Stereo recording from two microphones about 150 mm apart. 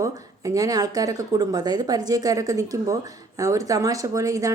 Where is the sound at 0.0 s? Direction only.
20° right (ahead or behind).